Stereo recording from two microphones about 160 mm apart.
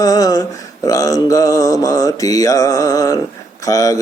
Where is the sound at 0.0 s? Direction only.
20° left (ahead or behind).